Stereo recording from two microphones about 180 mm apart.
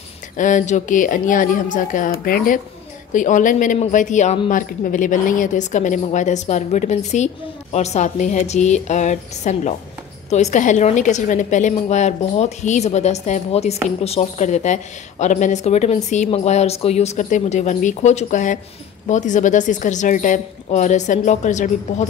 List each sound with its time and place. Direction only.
0.4 s a woman's voice: 45° left (ahead or behind)